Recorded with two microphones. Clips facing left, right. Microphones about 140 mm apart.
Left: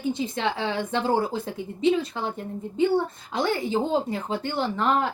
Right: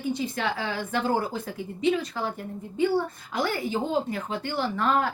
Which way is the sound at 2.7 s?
25° left (ahead or behind).